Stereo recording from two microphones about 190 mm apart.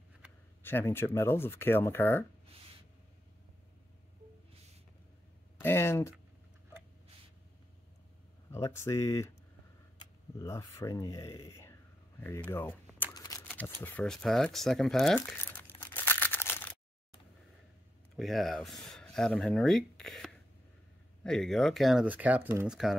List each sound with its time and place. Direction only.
0.6 s speech: 10° left (ahead or behind)
5.6 s a sound: 10° left (ahead or behind)
8.5 s speech: 15° left (ahead or behind)
13.1 s shuffling cards: 15° left (ahead or behind)
13.8 s crumpling: 5° left (ahead or behind)
18.1 s speech: centre (ahead or behind)